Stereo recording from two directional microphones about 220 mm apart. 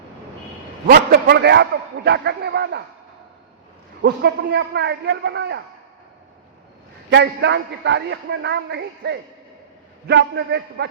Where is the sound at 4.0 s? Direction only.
50° right (ahead or behind).